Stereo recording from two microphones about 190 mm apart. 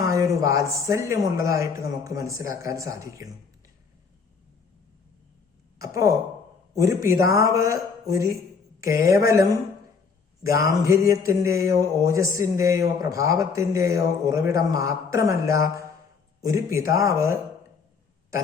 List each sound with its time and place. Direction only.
0.0 s a sound: 15° right (ahead or behind)
0.4 s a man's voice: 15° right (ahead or behind)
5.8 s a man's voice: 15° right (ahead or behind)